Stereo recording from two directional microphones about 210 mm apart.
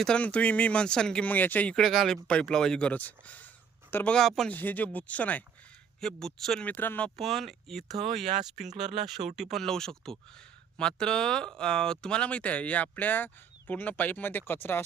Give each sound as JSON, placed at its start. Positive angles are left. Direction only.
{"t": 0.0, "sound": "speech", "side_deg": 5}
{"t": 8.3, "sound": "speech", "side_deg": -35}
{"t": 9.0, "sound": "speech", "side_deg": 0}